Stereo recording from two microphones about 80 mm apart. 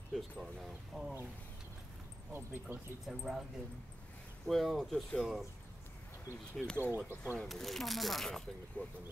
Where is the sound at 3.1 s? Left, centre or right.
Centre.